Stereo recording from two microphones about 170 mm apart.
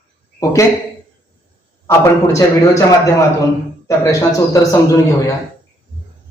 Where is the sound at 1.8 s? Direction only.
15° left (ahead or behind).